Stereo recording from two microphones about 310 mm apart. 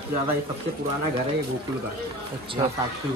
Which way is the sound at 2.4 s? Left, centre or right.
Centre.